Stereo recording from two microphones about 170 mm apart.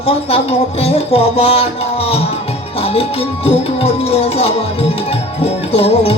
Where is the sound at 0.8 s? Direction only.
35° left (ahead or behind).